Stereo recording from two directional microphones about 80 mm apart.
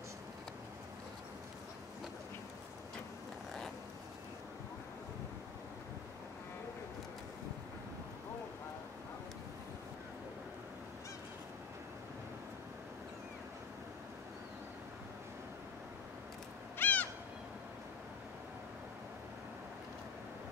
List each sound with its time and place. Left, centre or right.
16.7 s owl: left